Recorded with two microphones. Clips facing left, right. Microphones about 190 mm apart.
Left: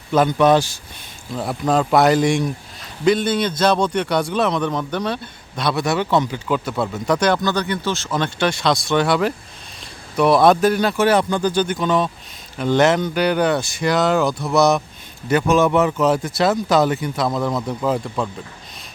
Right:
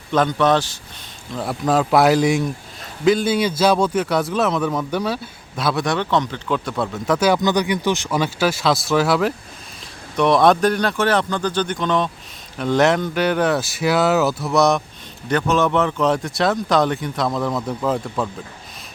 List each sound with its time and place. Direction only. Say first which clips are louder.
0.1 s a man's voice: left 2 dB; 10° left (ahead or behind)
7.3 s a man's voice: right 2 dB; 15° right (ahead or behind); by 18.3 s centre (ahead or behind)